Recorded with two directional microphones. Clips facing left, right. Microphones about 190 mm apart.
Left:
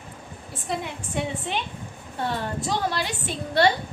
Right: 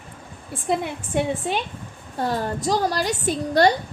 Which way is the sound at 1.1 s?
45° right (ahead or behind).